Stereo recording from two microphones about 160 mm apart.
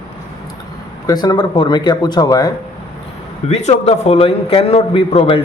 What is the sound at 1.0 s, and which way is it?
Speech, 25° left (ahead or behind).